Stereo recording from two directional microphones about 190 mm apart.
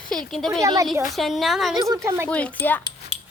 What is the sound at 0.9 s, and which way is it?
Speech, centre (ahead or behind).